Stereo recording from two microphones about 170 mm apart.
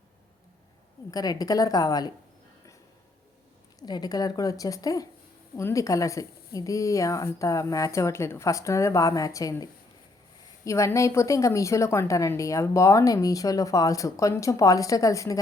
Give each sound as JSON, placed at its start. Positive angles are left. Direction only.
{"t": 1.1, "sound": "a woman's voice", "side_deg": 20}
{"t": 3.8, "sound": "a woman's voice", "side_deg": 25}